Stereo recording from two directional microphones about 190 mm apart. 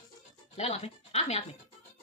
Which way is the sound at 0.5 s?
35° left (ahead or behind).